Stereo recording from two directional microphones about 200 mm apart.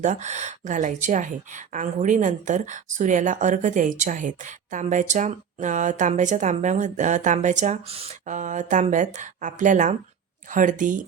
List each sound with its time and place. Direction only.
0.0 s speech: 35° right (ahead or behind)